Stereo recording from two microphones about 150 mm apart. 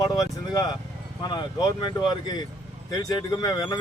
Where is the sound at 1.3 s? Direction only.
30° left (ahead or behind).